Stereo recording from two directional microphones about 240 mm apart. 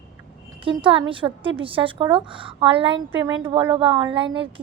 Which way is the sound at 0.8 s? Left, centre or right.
Right.